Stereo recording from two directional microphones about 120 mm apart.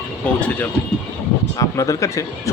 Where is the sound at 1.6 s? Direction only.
25° left (ahead or behind).